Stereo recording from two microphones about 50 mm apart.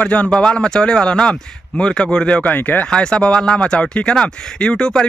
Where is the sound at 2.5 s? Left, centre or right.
Left.